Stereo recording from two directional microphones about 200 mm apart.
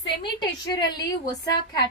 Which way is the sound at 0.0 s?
20° left (ahead or behind).